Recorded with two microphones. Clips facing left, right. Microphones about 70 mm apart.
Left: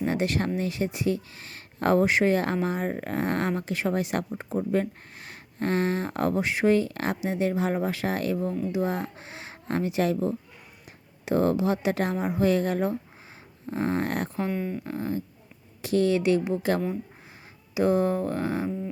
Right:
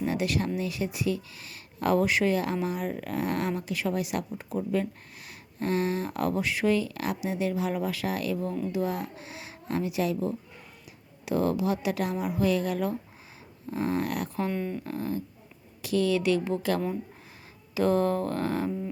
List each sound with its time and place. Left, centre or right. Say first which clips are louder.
0.0 s speech: left 2 dB; left
4.7 s speech: left 2 dB; left
14.4 s speech: left 1 dB; centre
14.8 s a woman's voice: left 1 dB; left